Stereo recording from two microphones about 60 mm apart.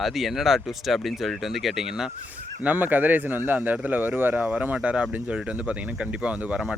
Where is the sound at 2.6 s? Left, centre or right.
Right.